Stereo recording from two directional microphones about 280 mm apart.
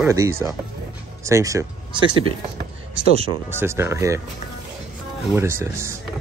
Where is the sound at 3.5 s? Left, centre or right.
Centre.